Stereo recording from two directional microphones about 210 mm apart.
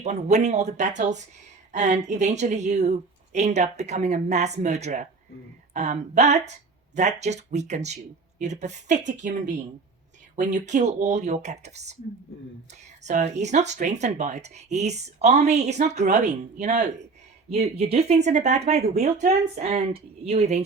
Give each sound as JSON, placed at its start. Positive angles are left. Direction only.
{"t": 0.0, "sound": "speech", "side_deg": -35}
{"t": 13.1, "sound": "speech", "side_deg": -35}